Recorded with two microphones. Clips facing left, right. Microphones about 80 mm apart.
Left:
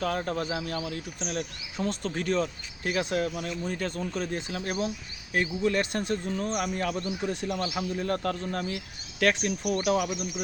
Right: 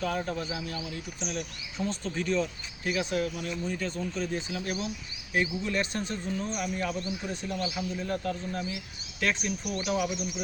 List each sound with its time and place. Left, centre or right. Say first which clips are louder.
0.0 s speech: left 2 dB; left
1.2 s speech: left 2 dB; left
1.8 s speech: left 2 dB; left
3.7 s a man's voice: left 1 dB; left